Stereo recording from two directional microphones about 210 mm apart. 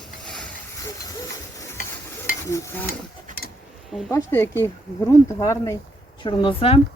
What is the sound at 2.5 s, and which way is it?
Speech, 15° left (ahead or behind).